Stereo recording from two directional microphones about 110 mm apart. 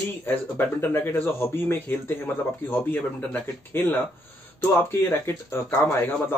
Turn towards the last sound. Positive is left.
turn(degrees=15)  # may be behind; listen again after turning